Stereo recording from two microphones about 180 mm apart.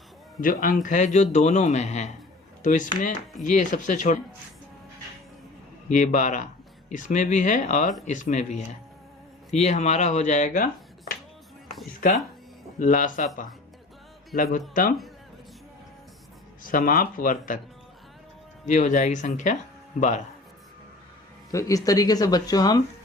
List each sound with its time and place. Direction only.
0.4 s speech: 50° left (ahead or behind)
5.9 s speech: 45° left (ahead or behind)
12.8 s speech: 45° left (ahead or behind)
16.6 s speech: 50° left (ahead or behind)
18.6 s speech: 45° left (ahead or behind)
21.5 s speech: 20° left (ahead or behind)